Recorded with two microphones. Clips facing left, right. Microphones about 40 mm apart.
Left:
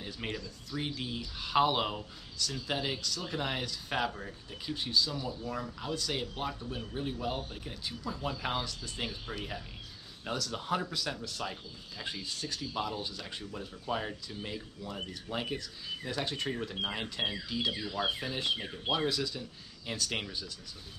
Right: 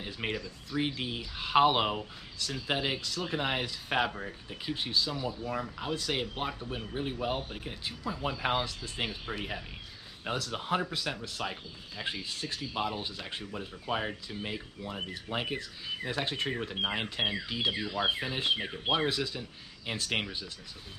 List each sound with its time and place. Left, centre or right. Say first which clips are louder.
0.0 s speech: right 3 dB; right